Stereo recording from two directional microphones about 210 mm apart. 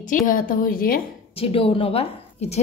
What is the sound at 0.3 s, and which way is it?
Speech, 40° left (ahead or behind).